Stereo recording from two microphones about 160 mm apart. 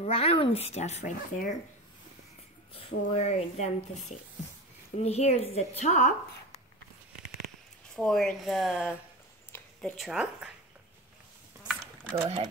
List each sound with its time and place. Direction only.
0.0 s speech: 40° left (ahead or behind)
2.7 s speech: 40° left (ahead or behind)
5.0 s speech: 40° left (ahead or behind)
7.9 s speech: 5° left (ahead or behind)
11.6 s a sound: 5° left (ahead or behind)